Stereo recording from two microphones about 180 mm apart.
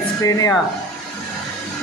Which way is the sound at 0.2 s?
20° left (ahead or behind).